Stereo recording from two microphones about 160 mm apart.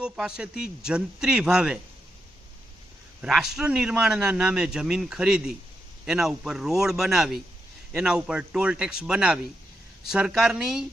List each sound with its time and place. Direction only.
0.0 s a man's voice: 5° right (ahead or behind)
3.2 s a man's voice: 5° right (ahead or behind)